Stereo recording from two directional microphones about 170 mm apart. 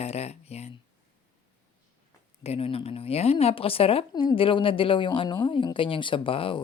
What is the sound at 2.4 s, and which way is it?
A woman's voice, 35° left (ahead or behind).